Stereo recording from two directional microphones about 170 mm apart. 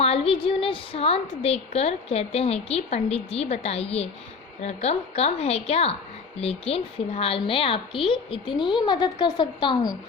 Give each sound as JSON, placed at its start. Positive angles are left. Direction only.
{"t": 0.0, "sound": "a woman's voice", "side_deg": 35}